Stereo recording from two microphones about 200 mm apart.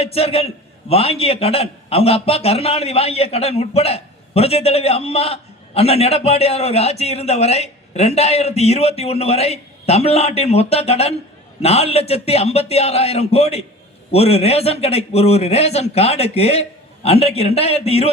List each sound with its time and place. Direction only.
0.0 s a man's voice: 30° left (ahead or behind)